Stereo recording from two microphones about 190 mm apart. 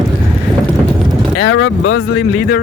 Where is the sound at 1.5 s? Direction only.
90° left.